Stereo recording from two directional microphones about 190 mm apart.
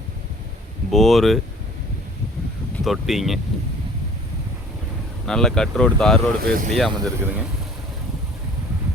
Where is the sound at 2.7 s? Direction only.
Centre (ahead or behind).